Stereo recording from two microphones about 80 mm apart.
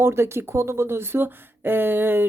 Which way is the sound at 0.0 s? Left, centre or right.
Right.